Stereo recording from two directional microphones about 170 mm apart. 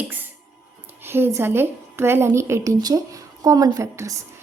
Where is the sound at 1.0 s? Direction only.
15° right (ahead or behind).